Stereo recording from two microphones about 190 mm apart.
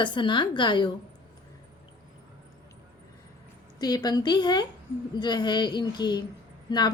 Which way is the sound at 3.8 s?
20° left (ahead or behind).